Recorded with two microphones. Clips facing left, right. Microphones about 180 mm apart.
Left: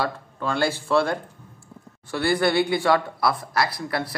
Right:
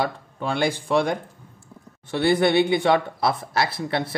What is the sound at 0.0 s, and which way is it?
Speech, 15° right (ahead or behind).